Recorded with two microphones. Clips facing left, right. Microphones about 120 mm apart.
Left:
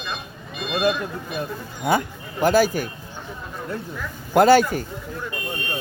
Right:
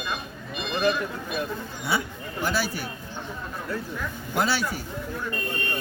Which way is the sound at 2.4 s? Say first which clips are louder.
Left 10 dB; 50° left (ahead or behind).